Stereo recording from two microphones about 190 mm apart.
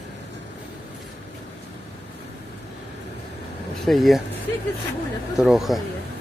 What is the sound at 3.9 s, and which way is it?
Speech, centre (ahead or behind).